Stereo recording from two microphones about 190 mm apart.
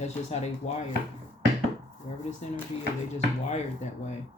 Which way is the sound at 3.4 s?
35° left (ahead or behind).